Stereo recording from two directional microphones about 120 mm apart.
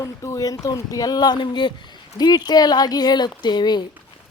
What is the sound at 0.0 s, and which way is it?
Speech, 25° left (ahead or behind).